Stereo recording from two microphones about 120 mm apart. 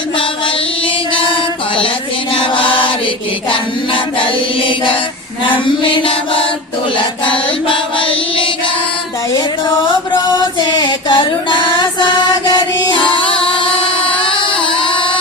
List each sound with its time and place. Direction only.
1.1 s music: 45° left (ahead or behind)
2.3 s chant: 45° left (ahead or behind)
7.7 s chant: 45° left (ahead or behind)
10.3 s music: 35° left (ahead or behind)